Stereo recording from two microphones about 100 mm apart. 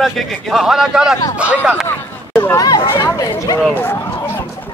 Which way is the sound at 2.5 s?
35° left (ahead or behind).